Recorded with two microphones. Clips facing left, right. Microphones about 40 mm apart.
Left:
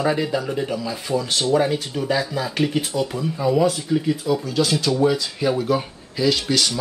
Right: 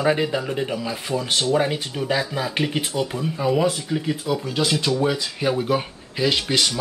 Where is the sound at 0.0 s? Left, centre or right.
Right.